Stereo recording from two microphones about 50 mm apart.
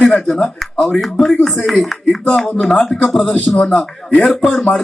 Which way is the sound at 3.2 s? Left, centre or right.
Left.